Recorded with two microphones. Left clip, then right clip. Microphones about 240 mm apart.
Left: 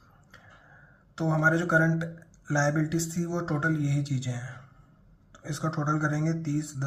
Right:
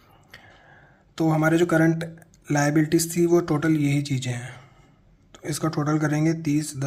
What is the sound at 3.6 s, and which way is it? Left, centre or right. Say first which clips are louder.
Speech: right 6 dB; right.